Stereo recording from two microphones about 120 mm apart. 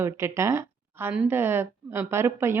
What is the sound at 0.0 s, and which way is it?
A woman's voice, 20° right (ahead or behind).